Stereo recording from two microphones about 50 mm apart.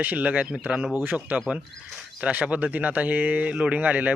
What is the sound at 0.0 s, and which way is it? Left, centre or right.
Speech, right.